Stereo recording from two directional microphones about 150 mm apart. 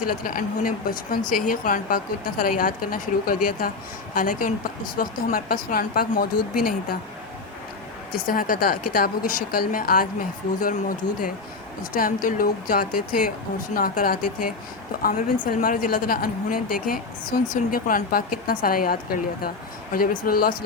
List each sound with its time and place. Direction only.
0.1 s a woman's voice: 70° left (ahead or behind); by 6.7 s 85° left
8.1 s a woman's voice: 70° left (ahead or behind)
15.5 s a woman's voice: 65° left (ahead or behind)